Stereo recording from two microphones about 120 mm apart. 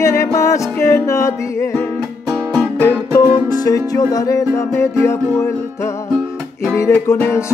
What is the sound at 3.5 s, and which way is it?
Music, 35° left (ahead or behind).